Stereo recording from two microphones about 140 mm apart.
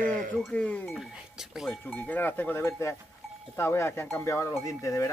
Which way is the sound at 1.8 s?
10° left (ahead or behind).